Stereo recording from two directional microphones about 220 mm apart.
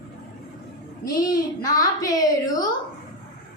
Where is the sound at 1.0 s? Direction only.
15° left (ahead or behind).